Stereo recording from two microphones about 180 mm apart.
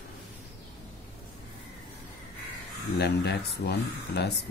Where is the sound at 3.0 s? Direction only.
65° left (ahead or behind).